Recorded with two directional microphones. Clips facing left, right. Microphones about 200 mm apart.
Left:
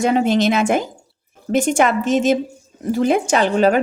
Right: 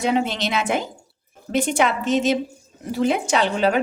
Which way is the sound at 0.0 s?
45° left (ahead or behind).